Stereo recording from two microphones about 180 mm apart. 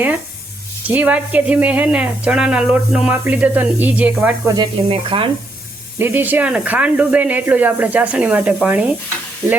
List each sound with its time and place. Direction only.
0.9 s speech: 10° right (ahead or behind)
4.5 s speech: 25° right (ahead or behind)
6.0 s speech: 10° right (ahead or behind)